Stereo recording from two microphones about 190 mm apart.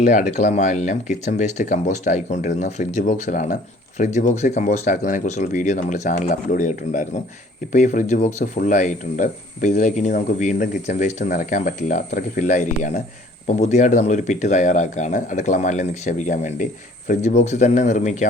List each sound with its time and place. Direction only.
0.0 s speech: 40° left (ahead or behind)